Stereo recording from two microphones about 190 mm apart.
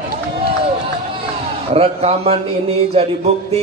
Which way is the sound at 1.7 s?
30° right (ahead or behind).